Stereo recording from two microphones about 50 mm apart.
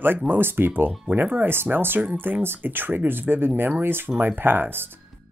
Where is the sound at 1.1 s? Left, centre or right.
Right.